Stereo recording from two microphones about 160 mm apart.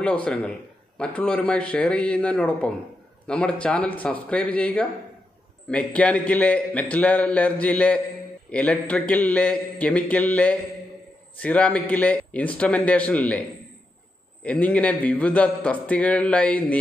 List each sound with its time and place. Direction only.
0.0 s a man's voice: 10° left (ahead or behind)
14.4 s a man's voice: 10° left (ahead or behind)